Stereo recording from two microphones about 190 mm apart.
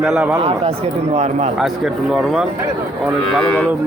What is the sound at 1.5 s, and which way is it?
Speech, centre (ahead or behind).